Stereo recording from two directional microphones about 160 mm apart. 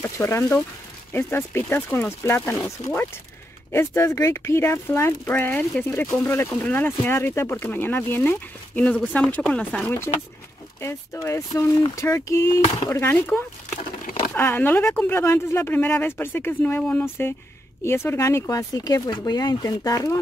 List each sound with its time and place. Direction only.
0.0 s speech: 15° left (ahead or behind)